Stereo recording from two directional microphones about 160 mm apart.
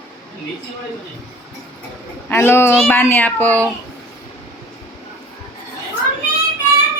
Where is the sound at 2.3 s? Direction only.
15° left (ahead or behind).